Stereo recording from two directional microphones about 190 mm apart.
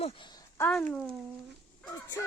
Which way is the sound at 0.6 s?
5° left (ahead or behind).